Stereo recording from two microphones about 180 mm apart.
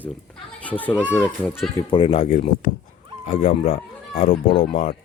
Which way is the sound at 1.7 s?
30° left (ahead or behind).